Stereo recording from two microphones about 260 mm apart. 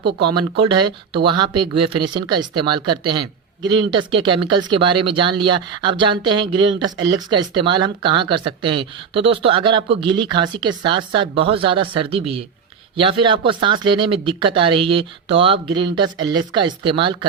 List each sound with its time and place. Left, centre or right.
0.2 s speech: centre
1.6 s speech: right
2.1 s speech: centre